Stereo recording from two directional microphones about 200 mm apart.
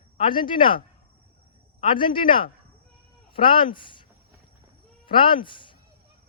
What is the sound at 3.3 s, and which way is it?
Speech, 25° left (ahead or behind).